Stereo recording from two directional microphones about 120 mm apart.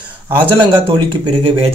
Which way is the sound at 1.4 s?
55° right (ahead or behind).